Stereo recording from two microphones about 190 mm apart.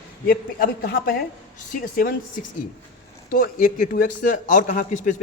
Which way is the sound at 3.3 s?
45° left (ahead or behind).